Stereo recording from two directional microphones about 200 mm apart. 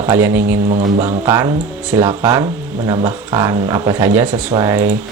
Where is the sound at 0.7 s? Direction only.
30° right (ahead or behind).